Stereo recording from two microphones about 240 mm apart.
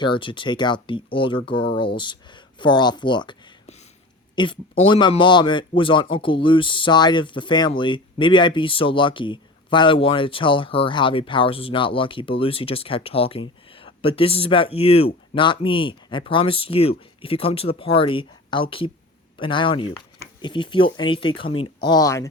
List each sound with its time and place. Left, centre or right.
0.0 s speech: centre